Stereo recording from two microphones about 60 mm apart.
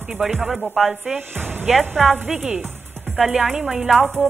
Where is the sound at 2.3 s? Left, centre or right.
Centre.